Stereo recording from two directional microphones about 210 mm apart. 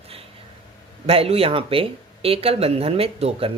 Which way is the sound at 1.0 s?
30° right (ahead or behind).